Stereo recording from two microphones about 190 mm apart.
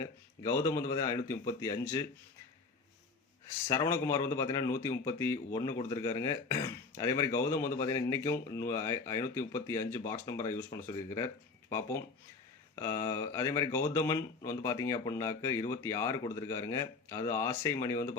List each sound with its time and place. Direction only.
0.0 s speech: 15° left (ahead or behind)
3.7 s speech: 15° left (ahead or behind)